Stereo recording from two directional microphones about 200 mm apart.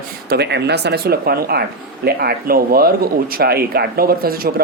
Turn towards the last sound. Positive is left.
turn(degrees=-50)  # may be behind; listen again after turning